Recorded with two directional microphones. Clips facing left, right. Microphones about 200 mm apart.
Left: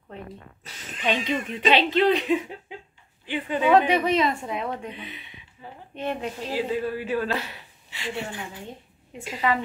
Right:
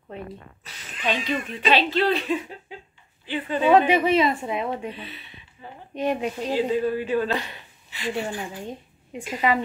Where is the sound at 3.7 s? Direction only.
5° right (ahead or behind).